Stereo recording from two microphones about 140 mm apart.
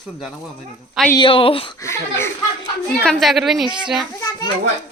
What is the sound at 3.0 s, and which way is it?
A woman's voice, centre (ahead or behind).